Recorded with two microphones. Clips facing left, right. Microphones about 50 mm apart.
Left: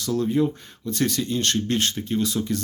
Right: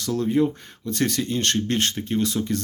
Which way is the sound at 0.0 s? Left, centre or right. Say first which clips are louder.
Right 1 dB; right.